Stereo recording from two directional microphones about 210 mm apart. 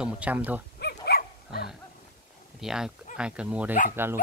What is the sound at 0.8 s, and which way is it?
Dog, 50° left (ahead or behind).